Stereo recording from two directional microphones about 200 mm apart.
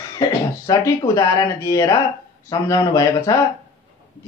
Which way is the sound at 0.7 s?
15° left (ahead or behind).